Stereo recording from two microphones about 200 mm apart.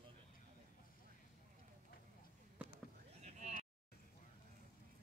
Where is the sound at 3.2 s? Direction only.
35° right (ahead or behind).